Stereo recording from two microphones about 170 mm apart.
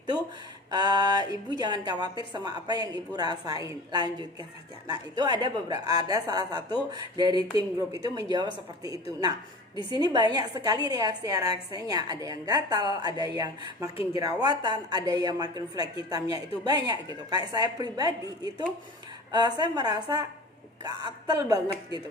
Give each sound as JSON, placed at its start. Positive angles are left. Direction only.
{"t": 0.7, "sound": "a woman's voice", "side_deg": -25}